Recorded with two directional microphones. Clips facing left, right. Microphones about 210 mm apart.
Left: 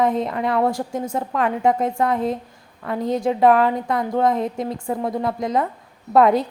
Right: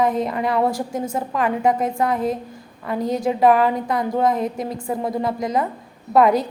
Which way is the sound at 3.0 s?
25° left (ahead or behind).